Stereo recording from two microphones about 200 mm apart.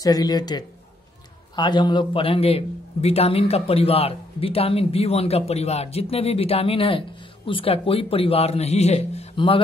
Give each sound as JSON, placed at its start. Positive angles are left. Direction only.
{"t": 0.0, "sound": "a man's voice", "side_deg": 20}